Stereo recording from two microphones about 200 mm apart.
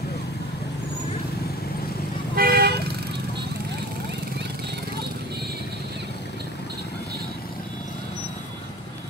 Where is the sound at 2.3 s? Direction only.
50° right (ahead or behind).